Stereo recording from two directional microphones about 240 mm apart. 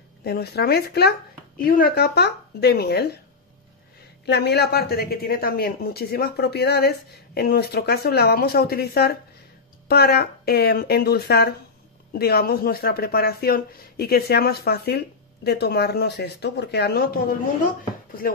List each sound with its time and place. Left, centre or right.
0.2 s speech: left
4.3 s speech: left